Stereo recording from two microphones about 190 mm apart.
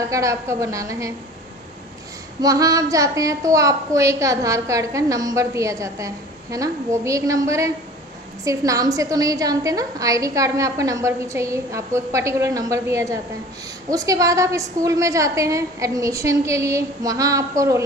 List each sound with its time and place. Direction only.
0.1 s a woman's voice: 15° right (ahead or behind)
2.4 s a woman's voice: 20° right (ahead or behind)